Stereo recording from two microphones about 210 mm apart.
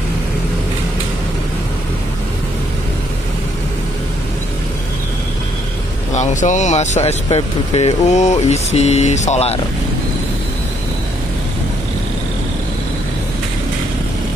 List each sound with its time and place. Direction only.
6.1 s speech: 35° left (ahead or behind)